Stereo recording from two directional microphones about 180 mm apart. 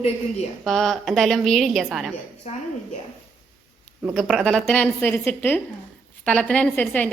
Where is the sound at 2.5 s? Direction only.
40° left (ahead or behind).